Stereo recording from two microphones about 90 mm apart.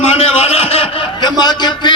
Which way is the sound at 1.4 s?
50° left (ahead or behind).